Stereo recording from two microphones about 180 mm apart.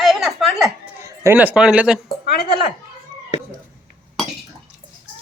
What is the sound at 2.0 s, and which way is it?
Speech, 60° left (ahead or behind).